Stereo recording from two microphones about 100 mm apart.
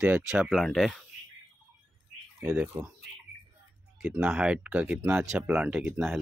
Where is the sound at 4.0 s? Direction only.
5° right (ahead or behind).